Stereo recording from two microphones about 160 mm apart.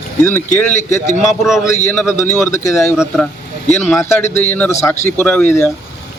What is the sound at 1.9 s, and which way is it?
A man's voice, 15° left (ahead or behind).